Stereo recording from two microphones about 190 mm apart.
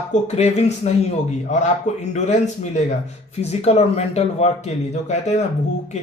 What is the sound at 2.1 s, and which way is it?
Speech, 40° left (ahead or behind).